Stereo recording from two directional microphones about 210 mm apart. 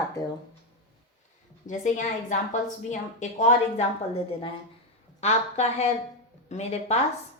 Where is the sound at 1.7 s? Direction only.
35° left (ahead or behind).